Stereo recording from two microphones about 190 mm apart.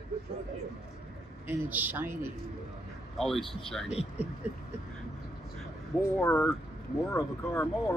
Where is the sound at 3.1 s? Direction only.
Centre (ahead or behind).